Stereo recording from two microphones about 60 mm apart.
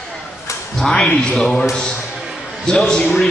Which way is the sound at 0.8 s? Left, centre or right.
Centre.